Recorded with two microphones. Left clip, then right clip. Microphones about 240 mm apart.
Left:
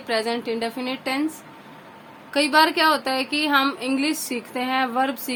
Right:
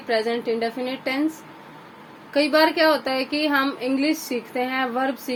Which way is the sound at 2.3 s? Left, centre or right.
Centre.